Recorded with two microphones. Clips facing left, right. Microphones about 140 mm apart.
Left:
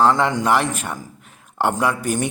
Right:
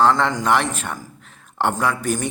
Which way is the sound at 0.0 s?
10° left (ahead or behind).